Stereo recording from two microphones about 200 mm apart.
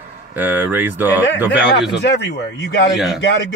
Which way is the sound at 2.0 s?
55° left (ahead or behind).